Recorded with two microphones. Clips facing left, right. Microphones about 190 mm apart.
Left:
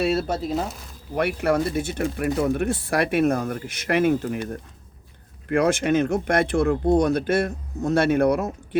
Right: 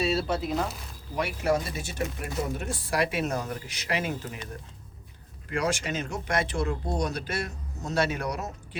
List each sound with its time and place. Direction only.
0.0 s a sound: 55° left (ahead or behind)
1.1 s speech: 60° left (ahead or behind)
5.5 s speech: 55° left (ahead or behind)